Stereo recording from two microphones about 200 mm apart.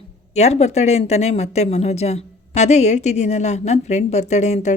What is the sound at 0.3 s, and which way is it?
Speech, 35° left (ahead or behind).